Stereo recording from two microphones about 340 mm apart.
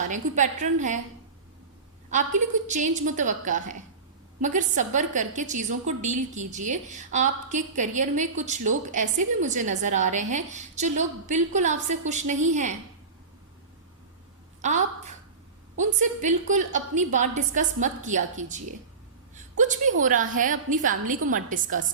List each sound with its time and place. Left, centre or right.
0.0 s a woman's voice: right
2.6 s a woman's voice: right
14.6 s a sound: right
15.8 s a woman's voice: right